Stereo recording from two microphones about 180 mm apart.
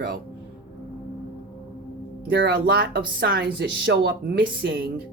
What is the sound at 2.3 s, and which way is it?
Speech, 65° right (ahead or behind).